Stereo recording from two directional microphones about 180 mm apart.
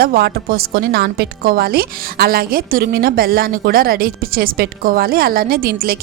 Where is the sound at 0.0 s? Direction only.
60° right (ahead or behind).